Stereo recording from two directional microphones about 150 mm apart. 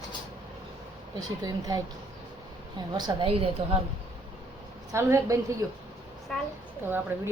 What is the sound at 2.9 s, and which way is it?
Speech, 35° right (ahead or behind).